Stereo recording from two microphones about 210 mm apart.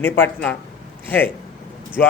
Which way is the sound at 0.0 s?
10° left (ahead or behind).